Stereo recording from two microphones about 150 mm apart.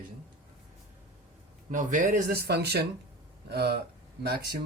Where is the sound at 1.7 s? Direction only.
55° right (ahead or behind).